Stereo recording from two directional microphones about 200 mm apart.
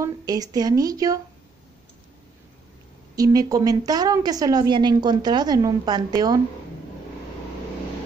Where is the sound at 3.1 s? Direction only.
20° right (ahead or behind).